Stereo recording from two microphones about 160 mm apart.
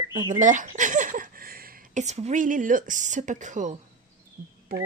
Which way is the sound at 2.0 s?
45° right (ahead or behind).